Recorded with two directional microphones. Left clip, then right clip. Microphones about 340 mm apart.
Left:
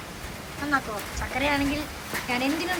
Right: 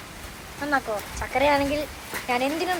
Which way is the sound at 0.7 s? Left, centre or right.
Centre.